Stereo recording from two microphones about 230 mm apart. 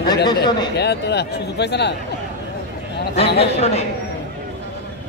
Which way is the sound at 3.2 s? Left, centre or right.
Left.